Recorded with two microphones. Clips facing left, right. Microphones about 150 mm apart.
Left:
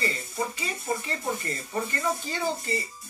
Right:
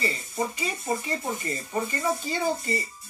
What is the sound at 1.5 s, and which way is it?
Speech, 15° right (ahead or behind).